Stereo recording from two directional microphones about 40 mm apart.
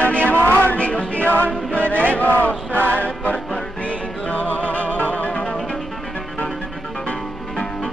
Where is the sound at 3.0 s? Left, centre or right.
Left.